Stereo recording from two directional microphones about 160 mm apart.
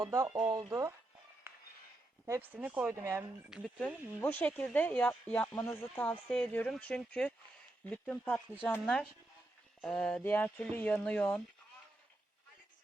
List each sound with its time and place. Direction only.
0.0 s speech: 20° right (ahead or behind)
1.5 s a sound: 15° right (ahead or behind)
2.2 s speech: 15° right (ahead or behind)
3.5 s speech: 5° left (ahead or behind)